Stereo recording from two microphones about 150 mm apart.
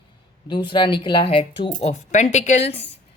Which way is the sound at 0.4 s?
30° left (ahead or behind).